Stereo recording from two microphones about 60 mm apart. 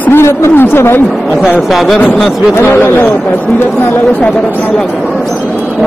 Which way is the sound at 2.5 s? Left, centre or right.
Left.